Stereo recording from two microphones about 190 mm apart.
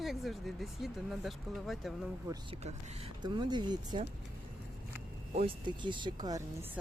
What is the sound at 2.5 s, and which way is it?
Speech, 30° right (ahead or behind).